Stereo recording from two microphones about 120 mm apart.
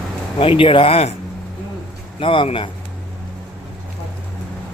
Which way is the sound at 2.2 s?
45° left (ahead or behind).